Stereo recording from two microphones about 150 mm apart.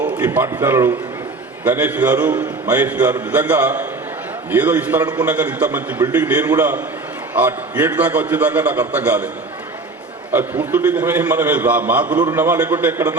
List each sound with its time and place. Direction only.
0.2 s a man's voice: 15° right (ahead or behind)
10.3 s a man's voice: 10° right (ahead or behind)